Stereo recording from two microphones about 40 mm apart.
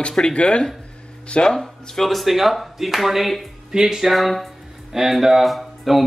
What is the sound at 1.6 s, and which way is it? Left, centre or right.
Speech, centre.